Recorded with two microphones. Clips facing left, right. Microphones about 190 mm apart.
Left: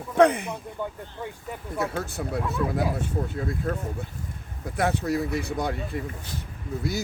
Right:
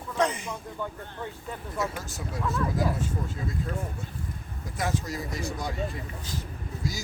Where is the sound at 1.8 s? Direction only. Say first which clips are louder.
Left 4 dB; 60° left (ahead or behind).